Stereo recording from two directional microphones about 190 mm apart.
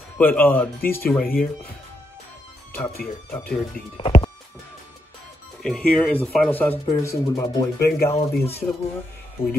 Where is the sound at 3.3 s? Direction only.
10° left (ahead or behind).